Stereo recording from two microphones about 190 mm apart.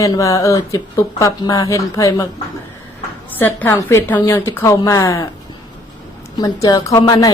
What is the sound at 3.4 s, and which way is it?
Speech, 10° left (ahead or behind).